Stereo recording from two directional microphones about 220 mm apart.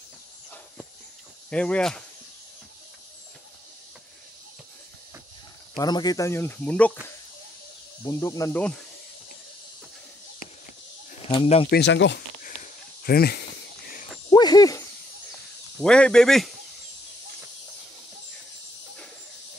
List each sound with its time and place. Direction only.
1.5 s speech: 5° left (ahead or behind)
5.8 s speech: 20° left (ahead or behind)
8.0 s speech: 15° left (ahead or behind)
11.2 s speech: 25° left (ahead or behind)
11.7 s speech: 50° left (ahead or behind)
12.4 s a sound: 40° left (ahead or behind)
14.3 s a sound: 20° left (ahead or behind)
15.8 s speech: 5° left (ahead or behind)